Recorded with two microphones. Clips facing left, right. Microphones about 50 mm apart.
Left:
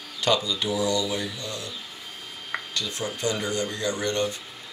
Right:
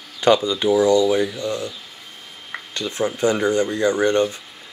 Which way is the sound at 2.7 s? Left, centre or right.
Right.